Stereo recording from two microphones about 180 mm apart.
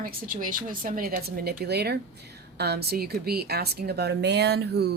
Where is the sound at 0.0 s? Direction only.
50° right (ahead or behind).